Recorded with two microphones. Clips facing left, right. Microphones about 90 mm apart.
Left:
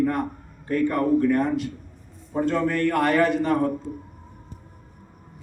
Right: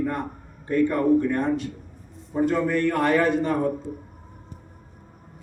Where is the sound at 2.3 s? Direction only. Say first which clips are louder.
Right 1 dB; 10° right (ahead or behind).